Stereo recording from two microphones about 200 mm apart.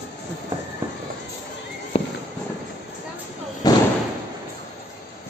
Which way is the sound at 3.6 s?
20° left (ahead or behind).